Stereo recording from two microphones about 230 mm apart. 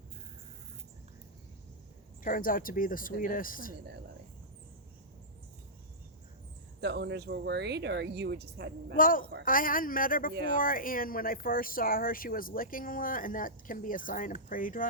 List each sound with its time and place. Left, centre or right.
2.2 s speech: left
6.8 s speech: right
9.0 s speech: left